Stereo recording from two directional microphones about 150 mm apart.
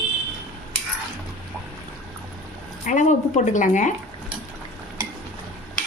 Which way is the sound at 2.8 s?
55° left (ahead or behind).